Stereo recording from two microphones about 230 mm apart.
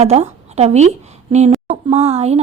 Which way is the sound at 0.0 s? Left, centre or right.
Right.